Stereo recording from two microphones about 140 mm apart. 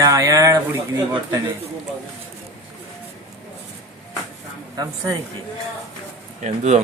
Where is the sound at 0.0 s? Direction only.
25° right (ahead or behind).